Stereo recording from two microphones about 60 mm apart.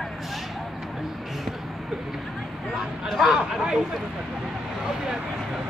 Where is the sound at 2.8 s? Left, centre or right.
Centre.